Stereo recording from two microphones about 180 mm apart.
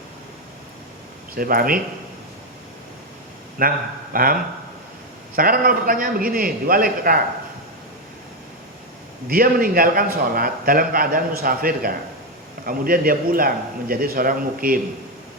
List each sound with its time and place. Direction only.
1.4 s a man's voice: 50° right (ahead or behind)
3.6 s a man's voice: 50° right (ahead or behind)
5.4 s a man's voice: 55° right (ahead or behind)
9.3 s a man's voice: 55° right (ahead or behind)